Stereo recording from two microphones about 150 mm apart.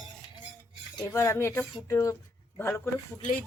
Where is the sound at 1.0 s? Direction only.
20° left (ahead or behind).